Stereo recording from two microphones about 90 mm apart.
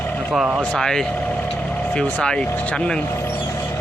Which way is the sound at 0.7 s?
5° left (ahead or behind).